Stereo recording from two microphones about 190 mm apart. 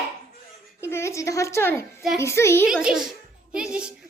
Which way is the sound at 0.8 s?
15° left (ahead or behind).